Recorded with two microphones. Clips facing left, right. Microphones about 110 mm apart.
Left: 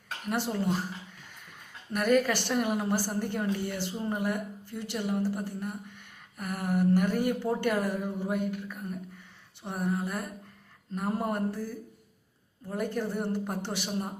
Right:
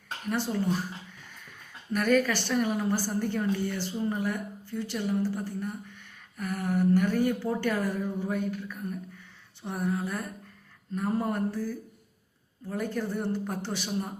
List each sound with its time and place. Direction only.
0.3 s a woman's voice: 20° left (ahead or behind)
1.9 s a woman's voice: 15° left (ahead or behind)